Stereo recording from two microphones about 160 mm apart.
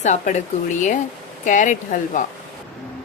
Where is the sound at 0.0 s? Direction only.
50° left (ahead or behind).